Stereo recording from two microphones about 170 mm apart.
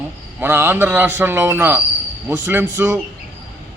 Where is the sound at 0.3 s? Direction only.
10° right (ahead or behind).